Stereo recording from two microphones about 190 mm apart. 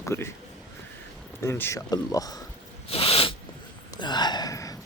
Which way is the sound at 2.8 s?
30° left (ahead or behind).